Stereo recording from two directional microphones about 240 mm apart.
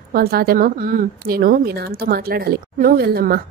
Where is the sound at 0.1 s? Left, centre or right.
Right.